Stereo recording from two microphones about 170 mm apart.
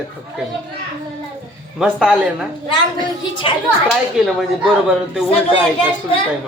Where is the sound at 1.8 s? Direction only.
5° right (ahead or behind).